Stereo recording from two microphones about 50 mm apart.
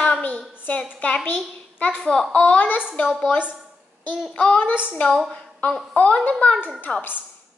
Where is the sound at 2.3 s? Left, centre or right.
Left.